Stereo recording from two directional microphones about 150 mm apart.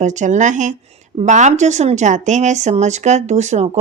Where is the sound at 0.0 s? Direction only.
55° right (ahead or behind).